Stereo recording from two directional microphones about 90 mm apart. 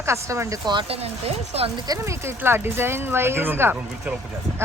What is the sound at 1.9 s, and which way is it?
Speech, 30° right (ahead or behind).